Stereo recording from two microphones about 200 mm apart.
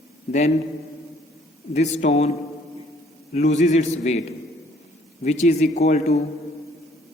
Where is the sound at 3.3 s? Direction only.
35° left (ahead or behind).